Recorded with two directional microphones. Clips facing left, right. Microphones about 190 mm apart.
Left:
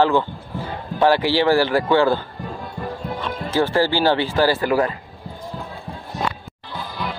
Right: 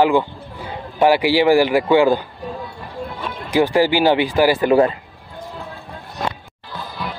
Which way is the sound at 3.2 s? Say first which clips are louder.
Right 3 dB; 15° right (ahead or behind).